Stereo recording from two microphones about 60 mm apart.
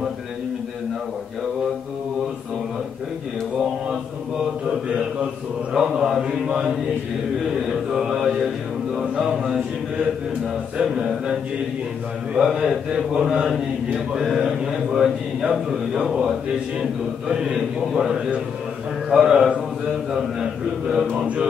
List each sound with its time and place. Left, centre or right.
4.6 s mantra: centre
12.4 s mantra: centre
17.3 s speech: centre
21.1 s mantra: centre